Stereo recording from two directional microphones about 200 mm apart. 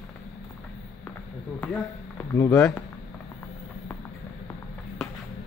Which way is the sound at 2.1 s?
15° left (ahead or behind).